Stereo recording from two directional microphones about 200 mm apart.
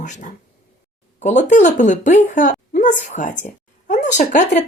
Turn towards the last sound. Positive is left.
turn(degrees=40)  # may be behind; listen again after turning